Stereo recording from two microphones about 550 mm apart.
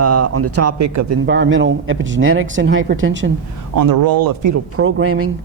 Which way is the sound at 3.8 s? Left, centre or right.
Right.